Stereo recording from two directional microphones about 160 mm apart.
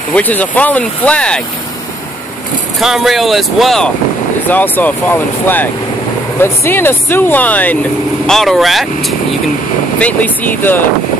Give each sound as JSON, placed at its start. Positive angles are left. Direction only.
{"t": 0.1, "sound": "speech", "side_deg": 10}
{"t": 2.8, "sound": "speech", "side_deg": 0}
{"t": 9.9, "sound": "speech", "side_deg": 10}